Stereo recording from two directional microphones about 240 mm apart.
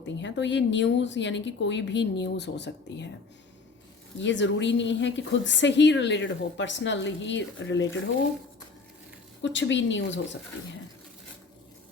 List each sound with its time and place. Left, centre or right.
0.0 s a woman's voice: left
4.2 s a woman's voice: left
9.4 s a woman's voice: left